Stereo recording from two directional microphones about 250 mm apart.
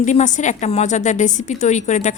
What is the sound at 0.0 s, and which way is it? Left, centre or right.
A woman's voice, left.